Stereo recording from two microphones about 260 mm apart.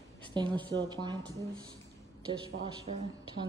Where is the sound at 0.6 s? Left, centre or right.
Centre.